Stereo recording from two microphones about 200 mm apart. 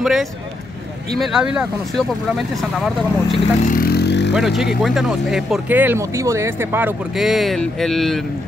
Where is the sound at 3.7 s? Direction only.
50° left (ahead or behind).